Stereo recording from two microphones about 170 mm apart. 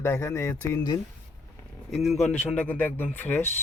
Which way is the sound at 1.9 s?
Centre (ahead or behind).